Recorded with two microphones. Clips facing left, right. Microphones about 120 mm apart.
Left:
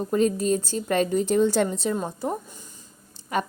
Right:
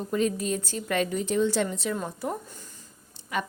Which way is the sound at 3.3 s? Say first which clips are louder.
Left 4 dB; 40° left (ahead or behind).